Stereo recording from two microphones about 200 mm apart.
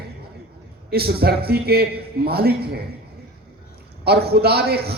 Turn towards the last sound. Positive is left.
turn(degrees=-50)  # may be behind; listen again after turning